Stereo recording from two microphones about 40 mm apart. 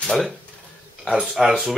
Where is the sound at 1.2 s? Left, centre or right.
Centre.